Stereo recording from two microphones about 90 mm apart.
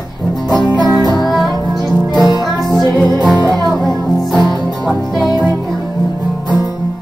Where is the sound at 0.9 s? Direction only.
Centre (ahead or behind).